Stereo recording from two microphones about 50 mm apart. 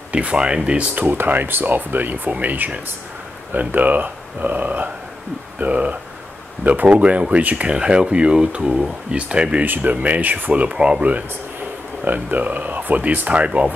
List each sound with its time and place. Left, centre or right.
0.1 s a sound: right
0.7 s speech: right
1.0 s speech: right
9.7 s speech: right
13.3 s speech: right